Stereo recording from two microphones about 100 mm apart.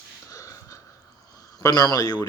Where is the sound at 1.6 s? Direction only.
40° left (ahead or behind).